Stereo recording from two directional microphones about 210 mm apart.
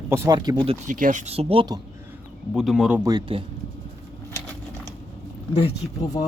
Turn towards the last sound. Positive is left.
turn(degrees=25)  # may be behind; listen again after turning